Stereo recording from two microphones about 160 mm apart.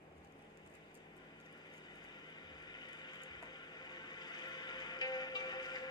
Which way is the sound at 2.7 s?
25° left (ahead or behind).